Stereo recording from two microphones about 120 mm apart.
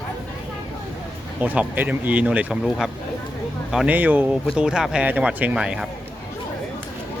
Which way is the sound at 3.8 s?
15° right (ahead or behind).